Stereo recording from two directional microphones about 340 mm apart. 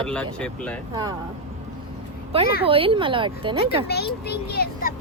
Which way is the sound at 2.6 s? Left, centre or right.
Centre.